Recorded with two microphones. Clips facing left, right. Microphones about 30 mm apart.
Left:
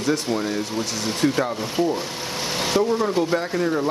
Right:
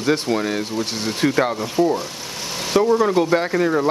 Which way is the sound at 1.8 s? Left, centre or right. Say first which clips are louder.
Right 4 dB; right.